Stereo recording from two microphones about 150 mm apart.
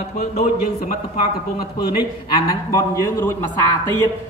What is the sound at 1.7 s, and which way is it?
Speech, 35° left (ahead or behind).